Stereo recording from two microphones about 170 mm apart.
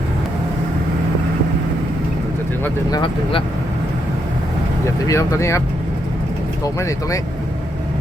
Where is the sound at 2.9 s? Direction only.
25° left (ahead or behind).